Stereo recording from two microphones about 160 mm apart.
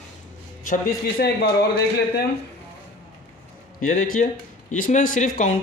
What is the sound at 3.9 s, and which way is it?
Speech, 55° left (ahead or behind).